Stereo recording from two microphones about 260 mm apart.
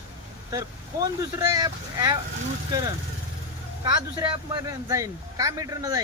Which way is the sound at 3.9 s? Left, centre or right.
Centre.